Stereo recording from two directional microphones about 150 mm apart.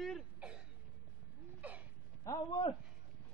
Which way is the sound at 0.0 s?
5° right (ahead or behind).